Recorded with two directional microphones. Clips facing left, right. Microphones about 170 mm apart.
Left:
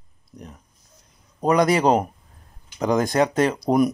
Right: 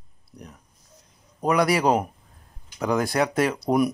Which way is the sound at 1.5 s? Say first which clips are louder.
Left 3 dB; 5° right (ahead or behind).